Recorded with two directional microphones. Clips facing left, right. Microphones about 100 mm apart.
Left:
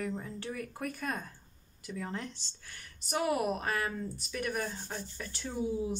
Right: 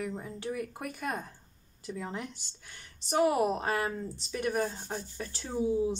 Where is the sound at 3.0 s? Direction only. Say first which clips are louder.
Right 5 dB; 30° right (ahead or behind).